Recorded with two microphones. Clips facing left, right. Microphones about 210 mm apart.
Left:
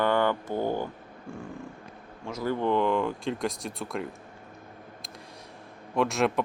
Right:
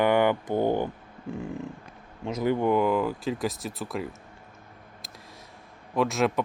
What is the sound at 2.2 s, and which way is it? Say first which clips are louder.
Speech: right 3 dB; 20° right (ahead or behind).